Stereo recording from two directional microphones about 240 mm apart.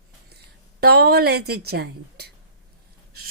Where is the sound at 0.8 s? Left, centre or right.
Right.